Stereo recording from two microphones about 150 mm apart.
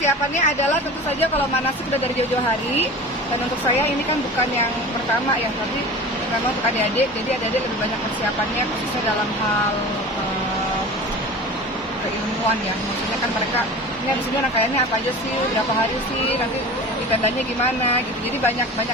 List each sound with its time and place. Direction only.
0.0 s speech: 50° left (ahead or behind)